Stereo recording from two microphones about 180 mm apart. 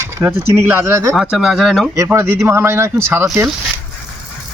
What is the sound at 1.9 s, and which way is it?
Speech, 15° right (ahead or behind).